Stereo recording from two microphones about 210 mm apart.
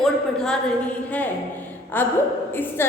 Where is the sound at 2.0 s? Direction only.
10° left (ahead or behind).